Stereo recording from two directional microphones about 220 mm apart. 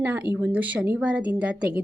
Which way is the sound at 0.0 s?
5° right (ahead or behind).